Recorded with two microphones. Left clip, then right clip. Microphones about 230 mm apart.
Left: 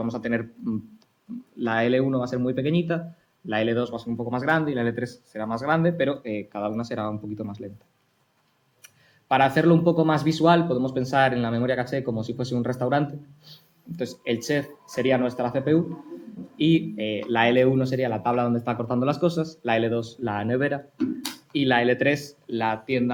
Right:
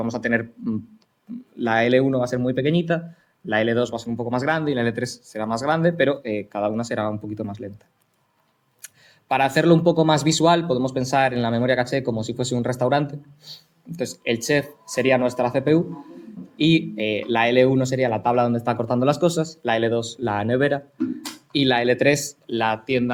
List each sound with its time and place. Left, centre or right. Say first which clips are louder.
0.0 s speech: right 5 dB; right
9.3 s speech: right 2 dB; right